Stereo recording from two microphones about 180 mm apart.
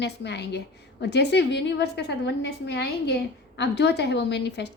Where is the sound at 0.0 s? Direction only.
70° left (ahead or behind).